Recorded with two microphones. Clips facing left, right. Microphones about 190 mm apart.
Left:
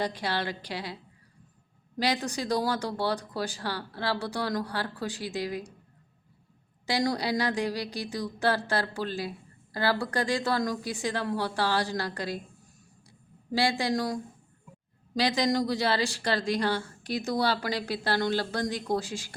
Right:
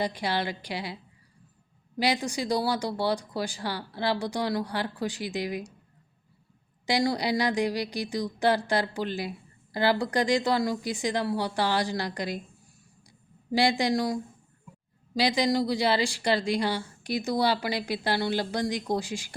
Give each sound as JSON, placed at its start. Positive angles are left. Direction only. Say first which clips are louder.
{"t": 0.0, "sound": "a woman's voice", "louder": "right 2 dB", "side_deg": -10}
{"t": 2.0, "sound": "a woman's voice", "louder": "right 2 dB", "side_deg": -10}
{"t": 6.8, "sound": "a woman's voice", "louder": "right 2 dB", "side_deg": -10}
{"t": 13.1, "sound": "a sound", "louder": "right 3 dB", "side_deg": -15}
{"t": 15.1, "sound": "a woman's voice", "louder": "right 1 dB", "side_deg": -10}